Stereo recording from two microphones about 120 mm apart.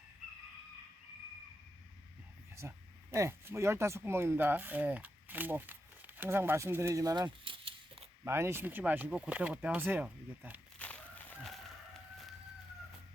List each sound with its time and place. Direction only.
2.6 s speech: 25° right (ahead or behind); by 8.0 s 45° right (ahead or behind)
8.2 s speech: 20° right (ahead or behind)
10.8 s chicken: 10° left (ahead or behind)